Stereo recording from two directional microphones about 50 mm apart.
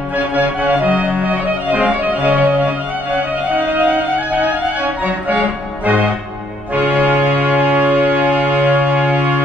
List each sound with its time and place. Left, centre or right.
0.2 s music: right
5.9 s music: right